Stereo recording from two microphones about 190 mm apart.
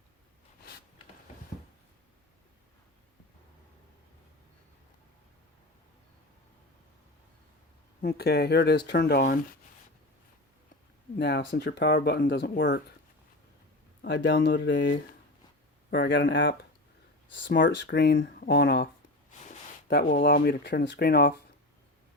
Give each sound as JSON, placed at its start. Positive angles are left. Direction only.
{"t": 8.0, "sound": "speech", "side_deg": 55}
{"t": 11.2, "sound": "speech", "side_deg": 60}
{"t": 14.0, "sound": "speech", "side_deg": 65}
{"t": 19.3, "sound": "a sound", "side_deg": 40}
{"t": 19.9, "sound": "speech", "side_deg": 50}